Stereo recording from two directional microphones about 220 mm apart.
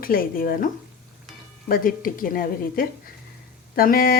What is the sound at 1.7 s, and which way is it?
A woman's voice, 40° left (ahead or behind).